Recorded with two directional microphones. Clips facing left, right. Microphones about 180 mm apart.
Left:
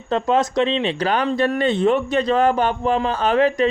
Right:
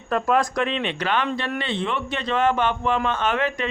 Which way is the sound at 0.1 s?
25° left (ahead or behind).